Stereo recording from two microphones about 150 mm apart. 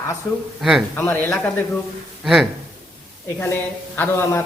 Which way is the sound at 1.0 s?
15° left (ahead or behind).